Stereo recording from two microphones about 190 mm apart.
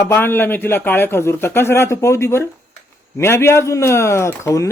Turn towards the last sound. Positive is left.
turn(degrees=15)  # may be behind; listen again after turning